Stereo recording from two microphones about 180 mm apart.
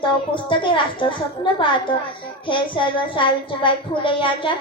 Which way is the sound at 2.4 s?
25° left (ahead or behind).